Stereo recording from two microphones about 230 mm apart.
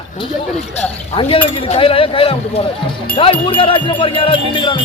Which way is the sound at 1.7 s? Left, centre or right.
Left.